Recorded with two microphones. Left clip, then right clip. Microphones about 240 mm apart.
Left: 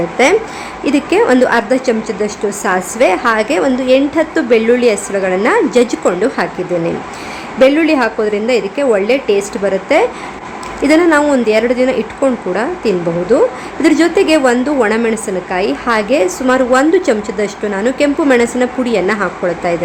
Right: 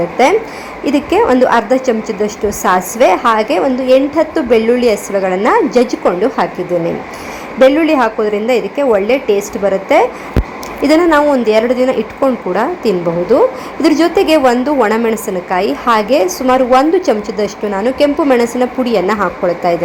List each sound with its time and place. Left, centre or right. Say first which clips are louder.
0.2 s a woman's voice: even; centre
2.0 s a woman's voice: right 1 dB; centre
2.6 s a woman's voice: right 2 dB; centre
7.6 s a woman's voice: right 1 dB; centre